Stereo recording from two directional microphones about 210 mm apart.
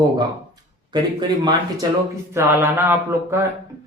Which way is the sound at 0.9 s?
20° right (ahead or behind).